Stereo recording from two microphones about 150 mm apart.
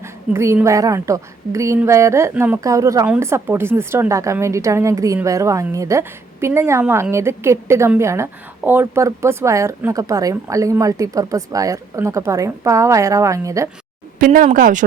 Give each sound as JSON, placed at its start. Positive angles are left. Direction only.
{"t": 0.0, "sound": "speech", "side_deg": -15}
{"t": 14.2, "sound": "speech", "side_deg": -65}